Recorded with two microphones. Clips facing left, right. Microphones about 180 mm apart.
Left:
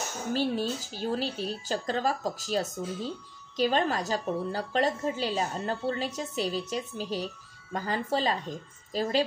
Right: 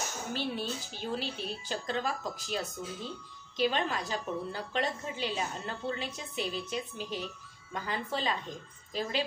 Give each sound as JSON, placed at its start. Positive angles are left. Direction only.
{"t": 0.3, "sound": "a woman's voice", "side_deg": 40}